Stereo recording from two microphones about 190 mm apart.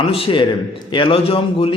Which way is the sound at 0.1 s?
25° left (ahead or behind).